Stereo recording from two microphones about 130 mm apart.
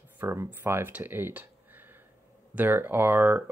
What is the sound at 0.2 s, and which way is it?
Speech, 20° right (ahead or behind).